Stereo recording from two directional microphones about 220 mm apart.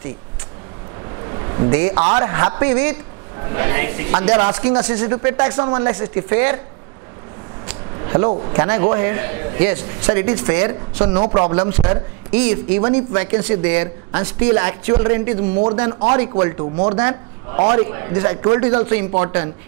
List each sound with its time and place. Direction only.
1.2 s a sound: 20° right (ahead or behind)
2.0 s a man's voice: 25° right (ahead or behind)
8.0 s a man's voice: 25° right (ahead or behind)